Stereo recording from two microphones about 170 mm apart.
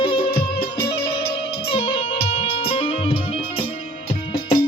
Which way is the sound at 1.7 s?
30° left (ahead or behind).